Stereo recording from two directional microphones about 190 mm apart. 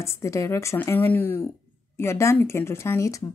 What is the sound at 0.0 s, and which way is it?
Speech, 15° left (ahead or behind).